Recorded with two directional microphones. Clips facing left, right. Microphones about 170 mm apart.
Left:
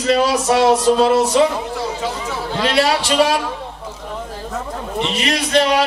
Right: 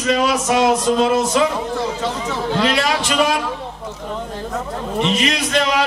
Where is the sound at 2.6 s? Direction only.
30° left (ahead or behind).